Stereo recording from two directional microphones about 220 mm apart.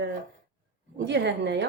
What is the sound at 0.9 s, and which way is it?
Speech, 55° right (ahead or behind).